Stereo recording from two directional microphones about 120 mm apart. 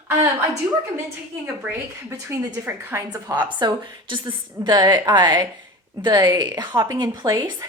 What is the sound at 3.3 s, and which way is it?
A woman's voice, 40° right (ahead or behind).